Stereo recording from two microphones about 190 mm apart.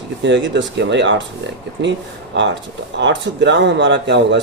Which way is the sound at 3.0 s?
70° right (ahead or behind).